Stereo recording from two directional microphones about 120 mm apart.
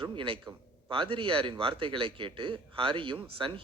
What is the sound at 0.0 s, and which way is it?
A man's voice, 45° right (ahead or behind).